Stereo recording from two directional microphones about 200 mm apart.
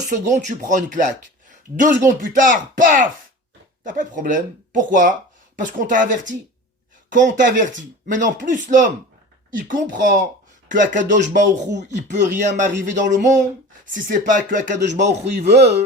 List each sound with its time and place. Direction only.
0.1 s speech: 40° right (ahead or behind)